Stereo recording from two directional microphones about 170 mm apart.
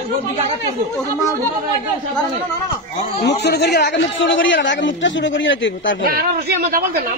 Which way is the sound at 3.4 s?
75° left (ahead or behind).